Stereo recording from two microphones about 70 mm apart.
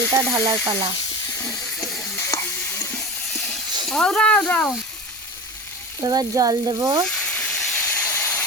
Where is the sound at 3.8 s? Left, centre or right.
Centre.